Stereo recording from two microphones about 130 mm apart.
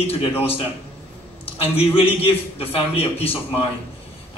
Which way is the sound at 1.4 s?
50° left (ahead or behind).